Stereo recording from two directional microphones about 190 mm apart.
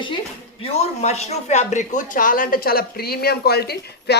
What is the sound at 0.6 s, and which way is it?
Speech, 35° left (ahead or behind).